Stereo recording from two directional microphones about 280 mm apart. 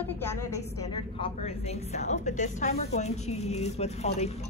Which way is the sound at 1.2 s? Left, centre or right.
Left.